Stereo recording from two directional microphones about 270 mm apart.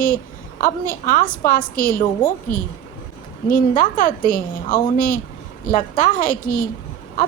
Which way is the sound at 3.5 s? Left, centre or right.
Left.